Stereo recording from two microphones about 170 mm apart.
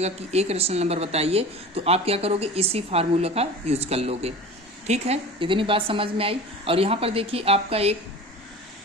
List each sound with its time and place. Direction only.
0.0 s a woman's voice: 40° right (ahead or behind)